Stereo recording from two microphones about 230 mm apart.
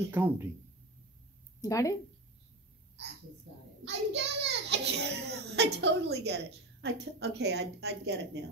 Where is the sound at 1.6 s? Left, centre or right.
Centre.